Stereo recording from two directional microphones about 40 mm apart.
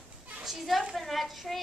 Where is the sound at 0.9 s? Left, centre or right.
Centre.